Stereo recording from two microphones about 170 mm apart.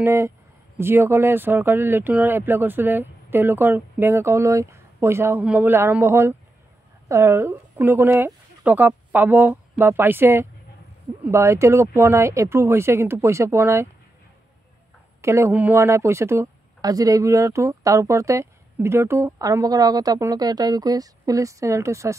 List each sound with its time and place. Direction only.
0.0 s speech: 15° right (ahead or behind)
15.2 s speech: 15° right (ahead or behind)